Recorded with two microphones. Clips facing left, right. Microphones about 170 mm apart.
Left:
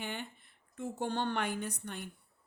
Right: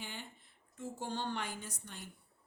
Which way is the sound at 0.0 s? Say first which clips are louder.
Left 7 dB; 60° left (ahead or behind).